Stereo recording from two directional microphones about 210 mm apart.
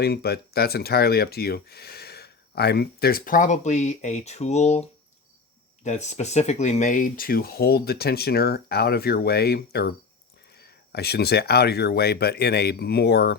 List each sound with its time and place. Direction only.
0.0 s speech: 50° left (ahead or behind)